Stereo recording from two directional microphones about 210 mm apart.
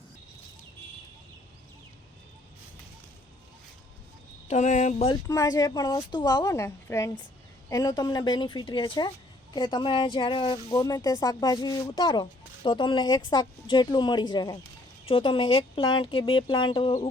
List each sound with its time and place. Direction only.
4.4 s speech: 35° left (ahead or behind)
5.0 s speech: 15° left (ahead or behind)